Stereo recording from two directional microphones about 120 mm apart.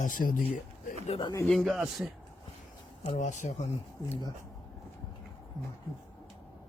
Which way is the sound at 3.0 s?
75° left (ahead or behind).